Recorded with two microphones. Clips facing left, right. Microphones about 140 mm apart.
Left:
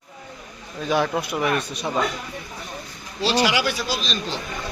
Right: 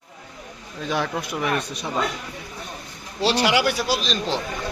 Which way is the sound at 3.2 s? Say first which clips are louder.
Right 1 dB; 60° right (ahead or behind).